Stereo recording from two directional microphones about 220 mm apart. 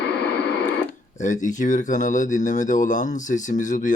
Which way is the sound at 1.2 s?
35° left (ahead or behind).